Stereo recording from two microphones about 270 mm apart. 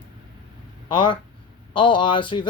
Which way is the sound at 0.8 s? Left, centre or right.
Centre.